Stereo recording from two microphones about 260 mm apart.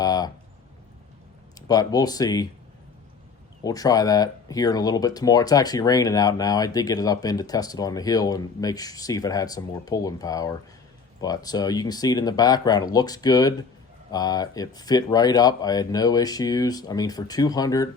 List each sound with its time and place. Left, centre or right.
0.0 s a sound: centre
1.6 s speech: centre
3.6 s speech: centre